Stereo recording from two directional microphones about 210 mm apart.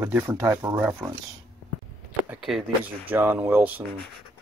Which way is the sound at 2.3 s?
Centre (ahead or behind).